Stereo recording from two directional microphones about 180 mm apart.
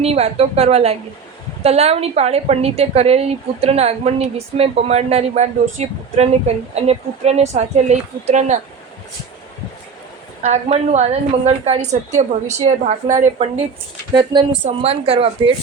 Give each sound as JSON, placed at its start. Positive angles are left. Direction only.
{"t": 0.0, "sound": "a woman's voice", "side_deg": -35}
{"t": 10.4, "sound": "a woman's voice", "side_deg": -35}
{"t": 14.1, "sound": "a woman's voice", "side_deg": -25}